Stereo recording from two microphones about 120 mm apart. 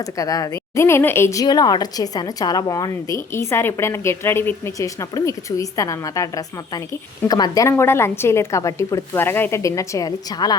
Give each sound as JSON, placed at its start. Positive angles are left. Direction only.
{"t": 0.0, "sound": "a woman's voice", "side_deg": 30}